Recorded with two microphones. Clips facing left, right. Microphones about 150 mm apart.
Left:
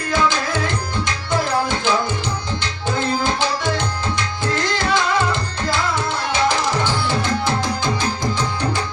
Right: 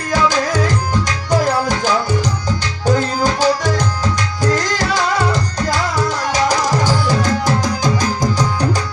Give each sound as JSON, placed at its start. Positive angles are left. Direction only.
{"t": 0.1, "sound": "tabla", "side_deg": -40}
{"t": 2.8, "sound": "music", "side_deg": -40}